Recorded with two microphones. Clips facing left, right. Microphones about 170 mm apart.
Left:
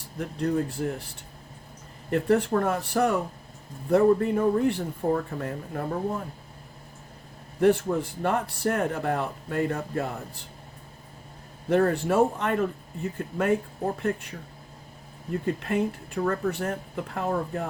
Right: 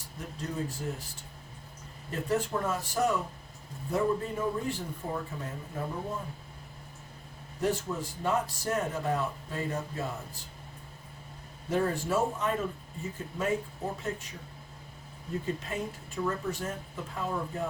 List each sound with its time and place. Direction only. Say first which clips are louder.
0.2 s speech: left 9 dB; 60° left (ahead or behind)
2.0 s speech: left 8 dB; 65° left (ahead or behind)
7.6 s speech: left 9 dB; 60° left (ahead or behind)
11.7 s speech: left 6 dB; 65° left (ahead or behind)
15.6 s speech: left 9 dB; 65° left (ahead or behind)